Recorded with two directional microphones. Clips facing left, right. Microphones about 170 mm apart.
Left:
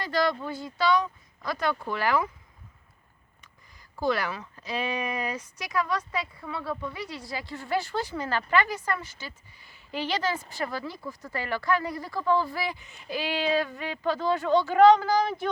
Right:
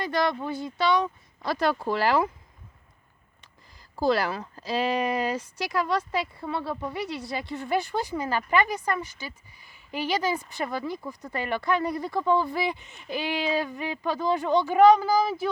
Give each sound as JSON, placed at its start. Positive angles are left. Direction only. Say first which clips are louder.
{"t": 0.0, "sound": "speech", "louder": "right 1 dB", "side_deg": -20}
{"t": 3.9, "sound": "speech", "louder": "right 3 dB", "side_deg": -35}